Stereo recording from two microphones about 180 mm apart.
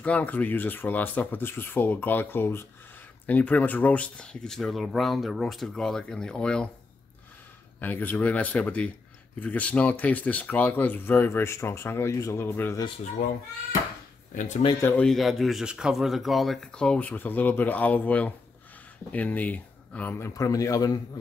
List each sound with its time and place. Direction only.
0.0 s speech: 10° left (ahead or behind)
7.8 s speech: 10° left (ahead or behind)
14.3 s speech: 45° left (ahead or behind)
14.8 s speech: 10° left (ahead or behind)